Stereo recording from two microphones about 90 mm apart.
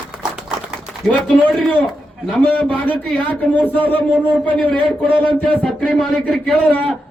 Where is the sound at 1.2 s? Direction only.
Centre (ahead or behind).